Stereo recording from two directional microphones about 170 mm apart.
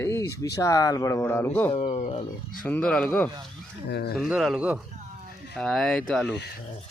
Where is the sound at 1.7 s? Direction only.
35° left (ahead or behind).